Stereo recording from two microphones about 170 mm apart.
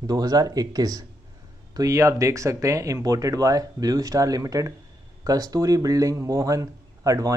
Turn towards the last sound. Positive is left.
turn(degrees=-20)  # may be behind; listen again after turning